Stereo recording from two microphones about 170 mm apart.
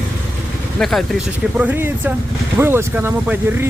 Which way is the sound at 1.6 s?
10° right (ahead or behind).